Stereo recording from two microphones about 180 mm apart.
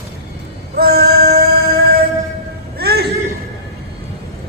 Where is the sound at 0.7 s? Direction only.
60° right (ahead or behind).